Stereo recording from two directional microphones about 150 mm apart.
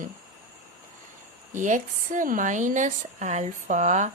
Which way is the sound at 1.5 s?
55° right (ahead or behind).